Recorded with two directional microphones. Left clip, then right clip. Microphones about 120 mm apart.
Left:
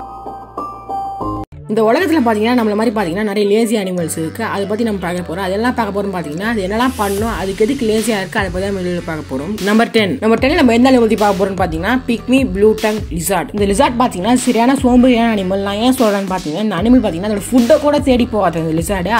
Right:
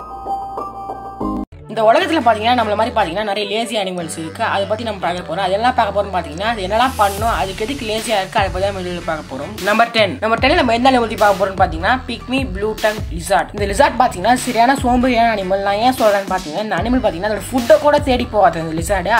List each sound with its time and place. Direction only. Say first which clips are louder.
1.8 s speech: even; 45° left (ahead or behind)
13.6 s speech: left 2 dB; 30° left (ahead or behind)
17.6 s speech: right 1 dB; 25° left (ahead or behind)